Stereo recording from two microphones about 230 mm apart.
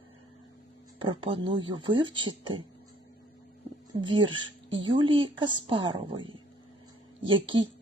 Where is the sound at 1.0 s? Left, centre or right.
Right.